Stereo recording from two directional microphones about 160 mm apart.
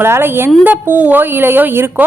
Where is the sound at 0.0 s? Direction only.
15° right (ahead or behind).